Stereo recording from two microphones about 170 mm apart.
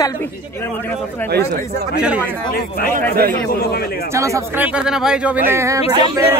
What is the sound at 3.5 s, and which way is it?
Speech, 65° left (ahead or behind).